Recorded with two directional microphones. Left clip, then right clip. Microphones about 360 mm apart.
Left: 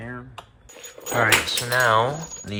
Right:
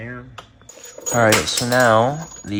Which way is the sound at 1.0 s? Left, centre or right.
Centre.